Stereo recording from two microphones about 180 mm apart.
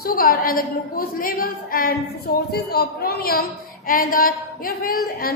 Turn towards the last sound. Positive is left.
turn(degrees=55)  # may be behind; listen again after turning